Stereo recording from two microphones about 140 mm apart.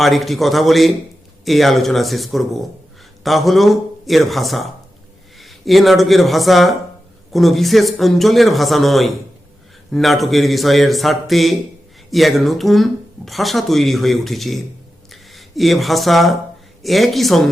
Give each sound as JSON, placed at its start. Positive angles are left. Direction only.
{"t": 0.0, "sound": "speech", "side_deg": 0}